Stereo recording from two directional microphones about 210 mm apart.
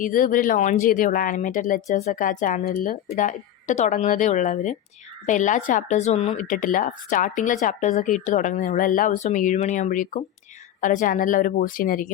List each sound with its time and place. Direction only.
0.0 s speech: 40° left (ahead or behind)